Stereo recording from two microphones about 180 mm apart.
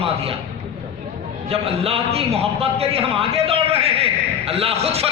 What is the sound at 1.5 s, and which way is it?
Speech, 30° right (ahead or behind).